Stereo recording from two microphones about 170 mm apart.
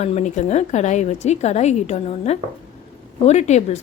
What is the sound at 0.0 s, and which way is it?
A woman's voice, 40° left (ahead or behind).